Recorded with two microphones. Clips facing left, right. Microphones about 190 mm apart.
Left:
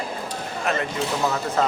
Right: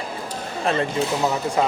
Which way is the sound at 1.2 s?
15° right (ahead or behind).